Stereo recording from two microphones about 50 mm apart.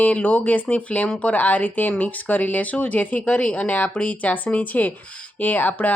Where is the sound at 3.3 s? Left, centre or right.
Left.